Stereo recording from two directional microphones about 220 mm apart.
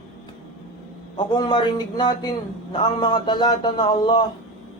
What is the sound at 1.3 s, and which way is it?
A man's voice, 20° left (ahead or behind).